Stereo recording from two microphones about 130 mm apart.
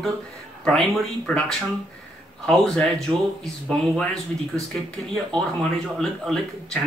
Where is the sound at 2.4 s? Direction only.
5° left (ahead or behind).